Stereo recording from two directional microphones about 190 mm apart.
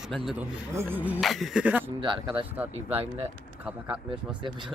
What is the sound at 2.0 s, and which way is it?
Speech, 25° right (ahead or behind).